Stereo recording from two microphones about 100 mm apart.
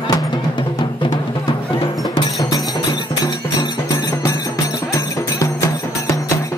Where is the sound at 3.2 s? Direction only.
40° left (ahead or behind).